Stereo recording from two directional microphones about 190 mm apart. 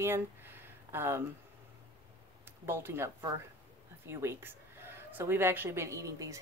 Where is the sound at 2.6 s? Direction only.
10° right (ahead or behind).